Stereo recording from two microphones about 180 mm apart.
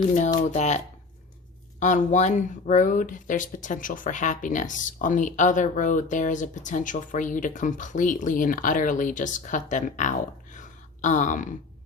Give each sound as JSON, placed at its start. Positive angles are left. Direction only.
{"t": 0.5, "sound": "speech", "side_deg": 40}
{"t": 1.8, "sound": "speech", "side_deg": 45}